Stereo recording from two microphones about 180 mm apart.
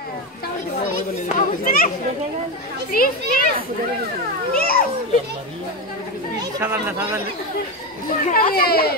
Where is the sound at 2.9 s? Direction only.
55° left (ahead or behind).